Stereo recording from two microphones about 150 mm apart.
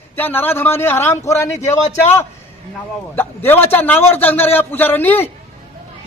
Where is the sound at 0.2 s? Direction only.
15° left (ahead or behind).